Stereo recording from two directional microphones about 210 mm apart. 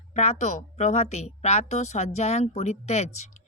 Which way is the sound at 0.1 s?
35° left (ahead or behind).